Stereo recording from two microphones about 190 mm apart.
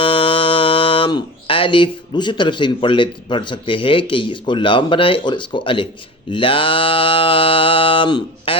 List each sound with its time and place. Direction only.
0.0 s speech: 30° left (ahead or behind)
6.3 s mantra: 30° left (ahead or behind)